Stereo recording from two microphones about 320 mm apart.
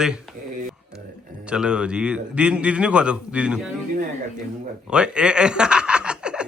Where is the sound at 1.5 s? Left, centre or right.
Centre.